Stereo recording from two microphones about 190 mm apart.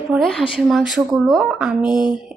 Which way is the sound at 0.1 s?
5° right (ahead or behind).